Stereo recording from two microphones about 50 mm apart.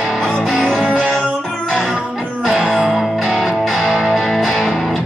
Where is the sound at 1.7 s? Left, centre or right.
Centre.